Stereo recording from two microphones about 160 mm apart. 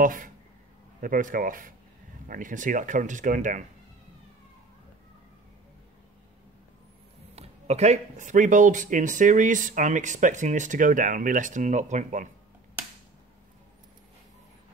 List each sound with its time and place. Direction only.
0.0 s speech: 55° right (ahead or behind)
7.3 s speech: 45° right (ahead or behind)